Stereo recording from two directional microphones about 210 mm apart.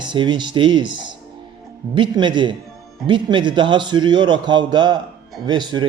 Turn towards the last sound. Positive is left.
turn(degrees=-20)  # may be behind; listen again after turning